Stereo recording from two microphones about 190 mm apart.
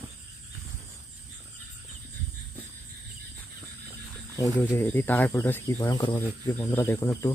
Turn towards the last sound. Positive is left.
turn(degrees=15)  # may be behind; listen again after turning